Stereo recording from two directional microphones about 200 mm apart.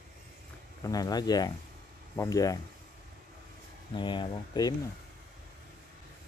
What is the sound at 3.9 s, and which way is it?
Speech, 25° left (ahead or behind).